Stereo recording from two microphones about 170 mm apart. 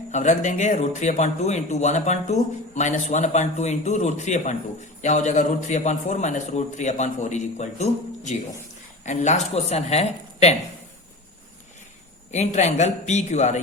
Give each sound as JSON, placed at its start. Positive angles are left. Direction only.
{"t": 0.1, "sound": "a woman's voice", "side_deg": 45}
{"t": 12.3, "sound": "speech", "side_deg": 45}